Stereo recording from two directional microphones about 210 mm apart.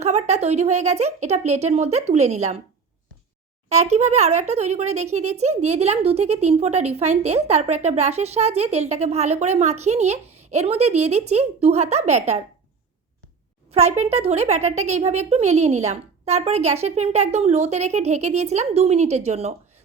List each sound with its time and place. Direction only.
0.0 s speech: 30° right (ahead or behind)
3.7 s speech: 30° right (ahead or behind)
13.7 s speech: 30° right (ahead or behind)